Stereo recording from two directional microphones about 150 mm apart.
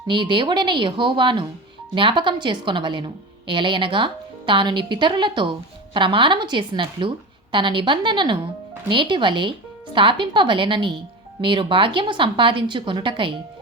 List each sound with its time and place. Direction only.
0.1 s a woman's voice: 30° right (ahead or behind)